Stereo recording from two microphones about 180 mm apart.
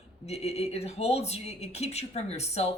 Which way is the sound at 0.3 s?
35° left (ahead or behind).